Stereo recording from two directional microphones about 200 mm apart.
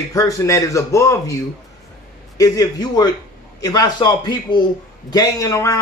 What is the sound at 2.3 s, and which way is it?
A man's voice, 20° left (ahead or behind).